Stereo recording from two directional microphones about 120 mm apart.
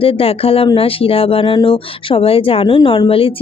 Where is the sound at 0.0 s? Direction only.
50° left (ahead or behind).